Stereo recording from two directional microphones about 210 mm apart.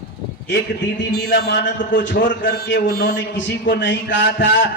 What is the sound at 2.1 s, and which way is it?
A man's voice, 45° left (ahead or behind).